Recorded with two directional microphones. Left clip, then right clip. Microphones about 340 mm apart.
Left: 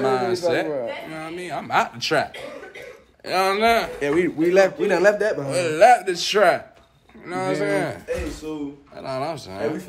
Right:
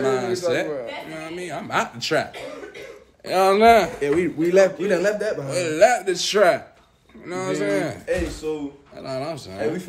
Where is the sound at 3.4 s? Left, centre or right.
Centre.